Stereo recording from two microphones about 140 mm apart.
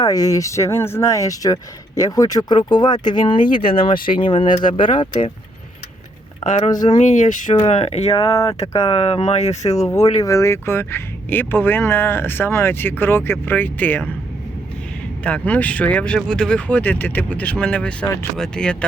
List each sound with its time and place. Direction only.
0.0 s speech: 25° left (ahead or behind)
3.3 s speech: 75° left (ahead or behind)
4.2 s speech: 40° left (ahead or behind)
6.7 s speech: 30° left (ahead or behind)
6.9 s speech: 60° left (ahead or behind)
9.6 s speech: 25° left (ahead or behind)
15.2 s speech: 10° left (ahead or behind)